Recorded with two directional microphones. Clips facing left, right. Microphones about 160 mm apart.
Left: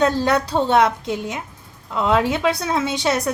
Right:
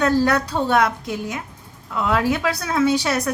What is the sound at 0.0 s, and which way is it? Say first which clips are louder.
A woman's voice: even; 25° left (ahead or behind).